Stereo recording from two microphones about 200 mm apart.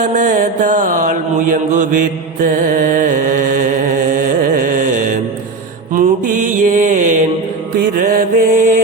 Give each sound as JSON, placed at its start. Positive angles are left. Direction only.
{"t": 0.1, "sound": "mantra", "side_deg": -40}
{"t": 2.4, "sound": "music", "side_deg": -40}
{"t": 5.9, "sound": "mantra", "side_deg": -40}